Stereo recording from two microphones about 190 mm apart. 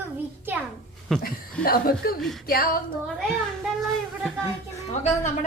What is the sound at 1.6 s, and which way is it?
Speech, 50° left (ahead or behind).